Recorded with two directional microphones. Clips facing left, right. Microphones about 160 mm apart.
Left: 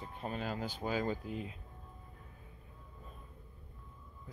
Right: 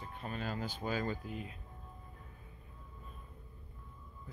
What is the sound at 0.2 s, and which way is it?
Speech, 15° left (ahead or behind).